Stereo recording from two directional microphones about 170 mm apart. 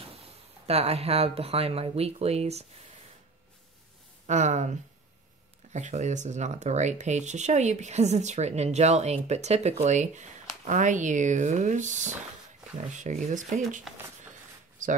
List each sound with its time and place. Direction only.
0.1 s speech: 35° right (ahead or behind)
4.3 s speech: 45° right (ahead or behind)